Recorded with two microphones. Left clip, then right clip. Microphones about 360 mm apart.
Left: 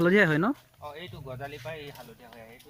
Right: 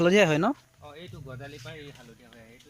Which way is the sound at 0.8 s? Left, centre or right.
Left.